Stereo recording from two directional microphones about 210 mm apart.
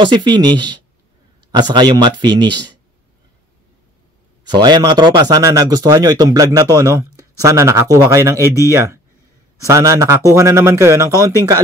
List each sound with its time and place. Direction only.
0.0 s speech: 20° right (ahead or behind)
4.6 s speech: 20° right (ahead or behind)